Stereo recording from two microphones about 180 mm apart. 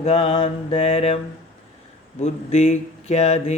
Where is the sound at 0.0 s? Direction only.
30° left (ahead or behind).